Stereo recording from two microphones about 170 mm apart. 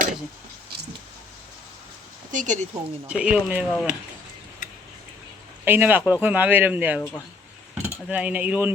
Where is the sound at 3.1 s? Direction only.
5° right (ahead or behind).